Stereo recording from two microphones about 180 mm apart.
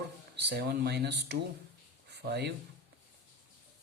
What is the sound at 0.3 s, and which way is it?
Speech, 65° right (ahead or behind).